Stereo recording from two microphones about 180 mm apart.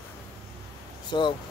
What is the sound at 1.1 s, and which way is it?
Speech, 25° left (ahead or behind).